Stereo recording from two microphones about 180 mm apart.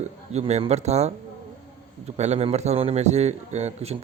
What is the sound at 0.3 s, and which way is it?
Speech, 35° right (ahead or behind).